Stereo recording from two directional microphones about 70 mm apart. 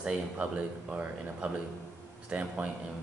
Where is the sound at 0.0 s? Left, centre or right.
Centre.